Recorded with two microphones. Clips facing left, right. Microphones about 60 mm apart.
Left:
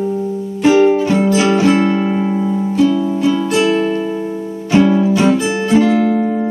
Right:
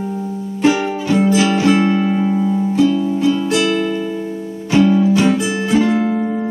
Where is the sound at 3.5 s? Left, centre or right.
Left.